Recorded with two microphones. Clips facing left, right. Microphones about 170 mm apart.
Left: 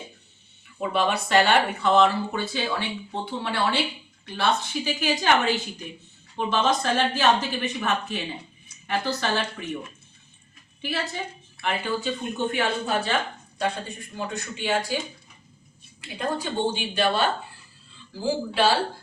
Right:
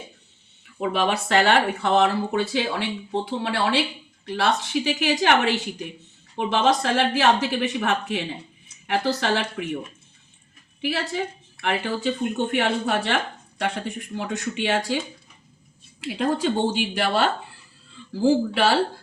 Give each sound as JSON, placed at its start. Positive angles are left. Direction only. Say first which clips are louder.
{"t": 0.9, "sound": "speech", "louder": "even", "side_deg": -75}
{"t": 10.8, "sound": "speech", "louder": "right 4 dB", "side_deg": -75}
{"t": 13.6, "sound": "speech", "louder": "right 1 dB", "side_deg": -85}
{"t": 16.0, "sound": "speech", "louder": "right 5 dB", "side_deg": -90}
{"t": 18.2, "sound": "speech", "louder": "right 4 dB", "side_deg": -75}